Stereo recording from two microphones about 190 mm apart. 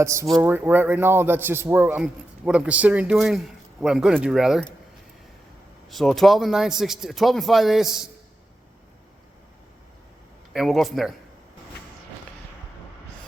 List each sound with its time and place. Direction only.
0.0 s a man's voice: 15° right (ahead or behind)
5.9 s a man's voice: centre (ahead or behind)
10.5 s a man's voice: centre (ahead or behind)